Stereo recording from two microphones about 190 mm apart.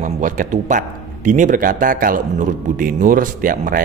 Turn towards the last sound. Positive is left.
turn(degrees=-45)  # may be behind; listen again after turning